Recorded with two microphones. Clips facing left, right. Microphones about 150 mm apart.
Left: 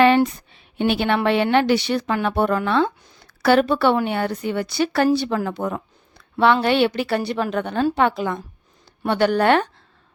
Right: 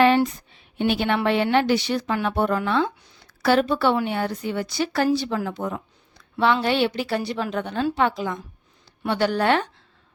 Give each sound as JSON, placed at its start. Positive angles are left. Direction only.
{"t": 0.0, "sound": "a woman's voice", "side_deg": 70}